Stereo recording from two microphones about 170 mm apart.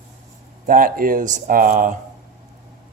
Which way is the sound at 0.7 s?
55° right (ahead or behind).